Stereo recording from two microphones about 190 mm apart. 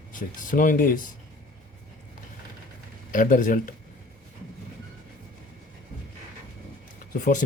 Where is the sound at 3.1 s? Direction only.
45° left (ahead or behind).